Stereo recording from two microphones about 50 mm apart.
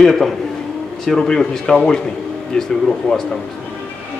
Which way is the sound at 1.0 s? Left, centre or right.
Centre.